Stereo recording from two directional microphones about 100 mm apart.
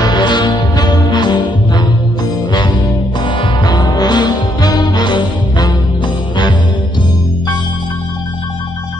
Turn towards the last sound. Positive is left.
turn(degrees=50)  # may be behind; listen again after turning